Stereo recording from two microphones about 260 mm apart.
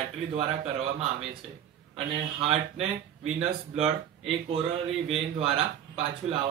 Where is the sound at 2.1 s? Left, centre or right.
Right.